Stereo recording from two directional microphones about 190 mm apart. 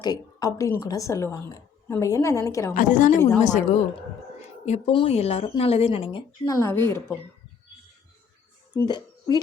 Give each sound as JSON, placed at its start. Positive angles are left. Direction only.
{"t": 0.0, "sound": "a woman's voice", "side_deg": 20}
{"t": 2.7, "sound": "speech", "side_deg": 40}
{"t": 6.4, "sound": "a woman's voice", "side_deg": 15}
{"t": 8.9, "sound": "speech", "side_deg": 20}